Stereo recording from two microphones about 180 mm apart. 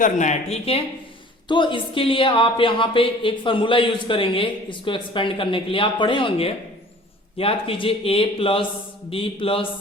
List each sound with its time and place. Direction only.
0.0 s speech: 40° left (ahead or behind)